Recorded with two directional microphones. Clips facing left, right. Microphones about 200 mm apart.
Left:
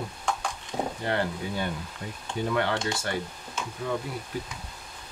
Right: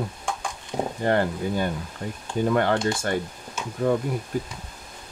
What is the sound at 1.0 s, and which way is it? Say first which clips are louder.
Speech: right 9 dB; 45° right (ahead or behind).